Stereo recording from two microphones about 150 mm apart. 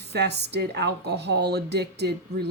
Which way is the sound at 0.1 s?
90° right.